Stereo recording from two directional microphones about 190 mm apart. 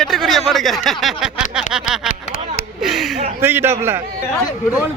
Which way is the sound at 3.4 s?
10° right (ahead or behind).